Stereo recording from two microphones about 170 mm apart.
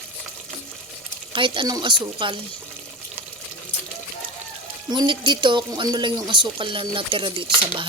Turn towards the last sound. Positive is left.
turn(degrees=-30)  # may be behind; listen again after turning